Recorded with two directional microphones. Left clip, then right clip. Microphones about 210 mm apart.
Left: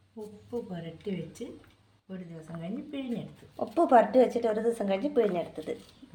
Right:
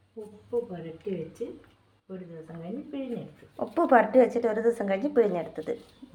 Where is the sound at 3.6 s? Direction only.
5° right (ahead or behind).